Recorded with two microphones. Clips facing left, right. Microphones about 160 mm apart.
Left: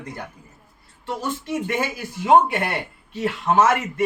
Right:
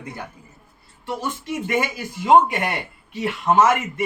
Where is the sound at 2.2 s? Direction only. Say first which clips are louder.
Right 1 dB; 15° right (ahead or behind).